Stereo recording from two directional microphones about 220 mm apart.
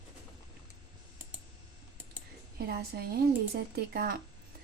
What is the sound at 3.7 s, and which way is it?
Speech, 45° right (ahead or behind).